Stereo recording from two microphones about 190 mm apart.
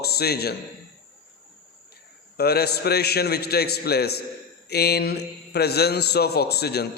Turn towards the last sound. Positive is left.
turn(degrees=60)  # may be behind; listen again after turning